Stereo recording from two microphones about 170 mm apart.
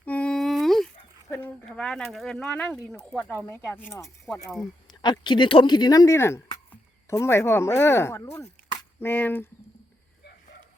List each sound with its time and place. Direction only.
0.0 s humming: 10° left (ahead or behind)
1.3 s speech: 10° left (ahead or behind)
4.9 s speech: 25° left (ahead or behind)